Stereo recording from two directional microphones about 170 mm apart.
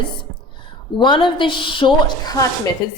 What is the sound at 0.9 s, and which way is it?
A woman's voice, 25° left (ahead or behind).